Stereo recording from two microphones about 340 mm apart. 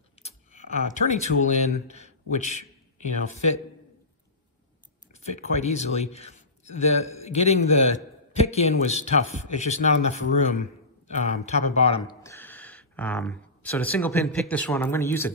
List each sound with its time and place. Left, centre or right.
0.9 s a man's voice: centre
5.1 s a man's voice: centre